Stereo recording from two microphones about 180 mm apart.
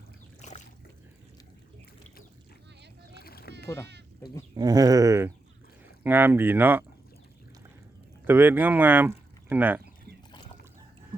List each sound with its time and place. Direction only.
0.4 s boat: 40° left (ahead or behind)
3.2 s rowboat: 60° left (ahead or behind)
4.5 s speech: 20° right (ahead or behind)
8.2 s speech: 10° right (ahead or behind)